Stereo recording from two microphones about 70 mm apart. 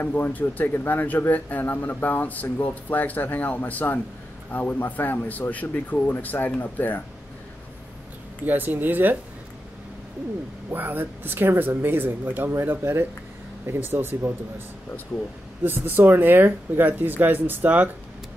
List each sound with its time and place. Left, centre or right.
0.0 s speech: left
8.5 s speech: right
10.7 s speech: right
15.6 s speech: right